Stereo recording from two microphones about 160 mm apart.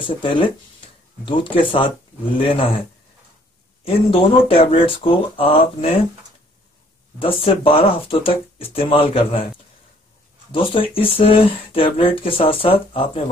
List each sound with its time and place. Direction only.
0.0 s speech: 30° left (ahead or behind)
3.8 s speech: 35° left (ahead or behind)
7.2 s speech: 35° left (ahead or behind)
10.5 s speech: 35° left (ahead or behind)